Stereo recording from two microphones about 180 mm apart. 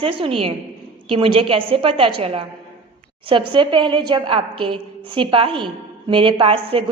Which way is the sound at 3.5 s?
25° right (ahead or behind).